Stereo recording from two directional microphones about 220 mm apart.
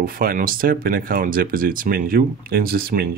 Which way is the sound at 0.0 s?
40° right (ahead or behind).